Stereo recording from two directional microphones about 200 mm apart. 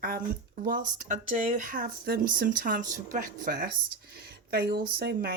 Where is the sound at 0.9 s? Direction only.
40° right (ahead or behind).